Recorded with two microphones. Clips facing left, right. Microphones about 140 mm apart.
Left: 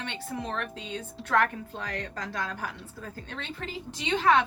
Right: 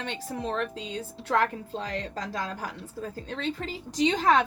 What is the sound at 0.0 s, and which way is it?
A woman's voice, 35° right (ahead or behind).